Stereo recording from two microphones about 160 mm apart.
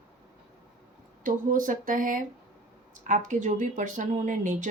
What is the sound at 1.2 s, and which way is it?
Speech, 55° right (ahead or behind).